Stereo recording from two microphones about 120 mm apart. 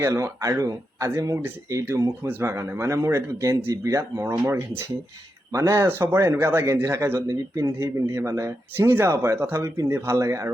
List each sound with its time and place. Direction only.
0.0 s a man's voice: 25° right (ahead or behind)